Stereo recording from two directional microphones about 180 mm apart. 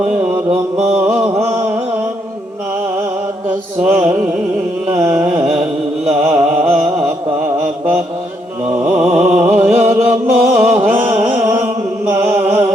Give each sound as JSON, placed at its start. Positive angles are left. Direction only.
{"t": 0.0, "sound": "mantra", "side_deg": -5}
{"t": 1.2, "sound": "a sound", "side_deg": -15}
{"t": 3.9, "sound": "music", "side_deg": -5}
{"t": 4.9, "sound": "carnatic music", "side_deg": -5}
{"t": 6.1, "sound": "music", "side_deg": -5}
{"t": 8.8, "sound": "music", "side_deg": -5}